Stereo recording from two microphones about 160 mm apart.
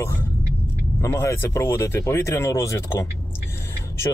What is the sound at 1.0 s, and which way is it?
Speech, 20° left (ahead or behind).